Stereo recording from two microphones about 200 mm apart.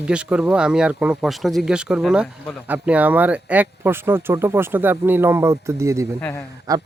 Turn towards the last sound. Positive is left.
turn(degrees=-20)  # may be behind; listen again after turning